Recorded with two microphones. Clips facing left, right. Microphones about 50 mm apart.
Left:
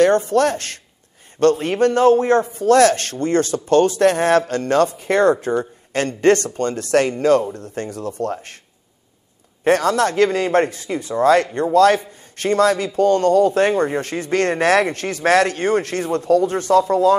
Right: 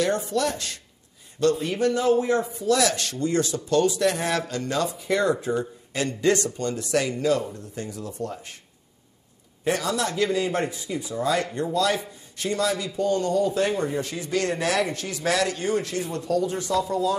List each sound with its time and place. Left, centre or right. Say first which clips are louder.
0.0 s a man's voice: left 9 dB; left
9.7 s a man's voice: left 9 dB; left